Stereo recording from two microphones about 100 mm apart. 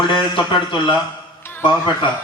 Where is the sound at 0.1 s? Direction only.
55° left (ahead or behind).